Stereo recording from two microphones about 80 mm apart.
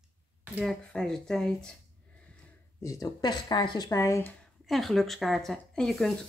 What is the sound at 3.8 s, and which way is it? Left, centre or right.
Speech, left.